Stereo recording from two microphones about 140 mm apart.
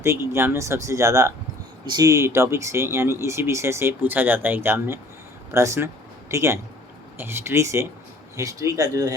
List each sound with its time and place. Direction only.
0.0 s speech: 20° right (ahead or behind)